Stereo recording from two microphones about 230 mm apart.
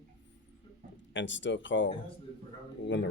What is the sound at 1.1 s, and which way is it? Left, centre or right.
Speech, left.